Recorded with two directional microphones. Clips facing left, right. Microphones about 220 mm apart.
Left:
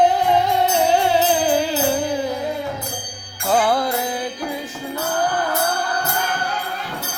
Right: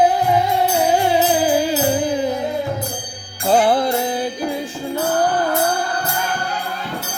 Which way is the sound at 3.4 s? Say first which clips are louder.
Right 3 dB; 25° right (ahead or behind).